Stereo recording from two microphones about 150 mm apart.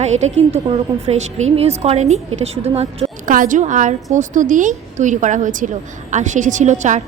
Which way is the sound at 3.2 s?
65° right (ahead or behind).